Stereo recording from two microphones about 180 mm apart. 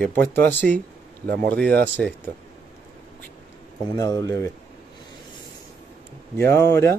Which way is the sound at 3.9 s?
20° left (ahead or behind).